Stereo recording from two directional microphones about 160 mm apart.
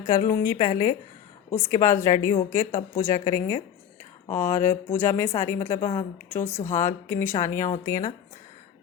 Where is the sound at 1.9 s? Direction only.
50° left (ahead or behind).